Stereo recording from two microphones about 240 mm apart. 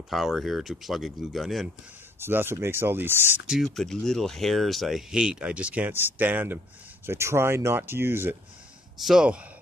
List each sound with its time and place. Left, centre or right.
0.1 s speech: centre